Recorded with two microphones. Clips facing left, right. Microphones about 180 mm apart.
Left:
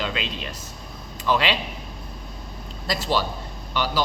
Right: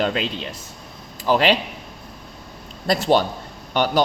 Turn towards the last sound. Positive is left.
turn(degrees=-55)  # may be behind; listen again after turning